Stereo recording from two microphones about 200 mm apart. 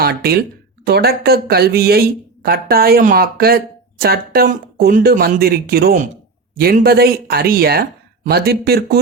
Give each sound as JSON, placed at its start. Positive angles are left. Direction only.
{"t": 0.0, "sound": "speech", "side_deg": -50}